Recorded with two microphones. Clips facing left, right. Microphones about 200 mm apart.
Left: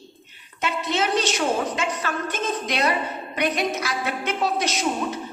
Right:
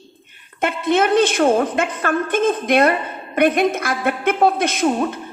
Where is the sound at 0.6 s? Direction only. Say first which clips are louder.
Right 7 dB; 55° right (ahead or behind).